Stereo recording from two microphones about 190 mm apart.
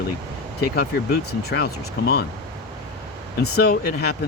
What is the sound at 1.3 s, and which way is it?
Speech, 60° left (ahead or behind).